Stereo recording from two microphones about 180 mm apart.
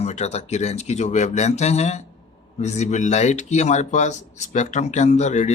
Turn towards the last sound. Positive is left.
turn(degrees=40)  # may be behind; listen again after turning